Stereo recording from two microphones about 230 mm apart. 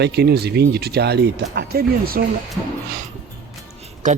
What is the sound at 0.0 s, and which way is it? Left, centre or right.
Speech, right.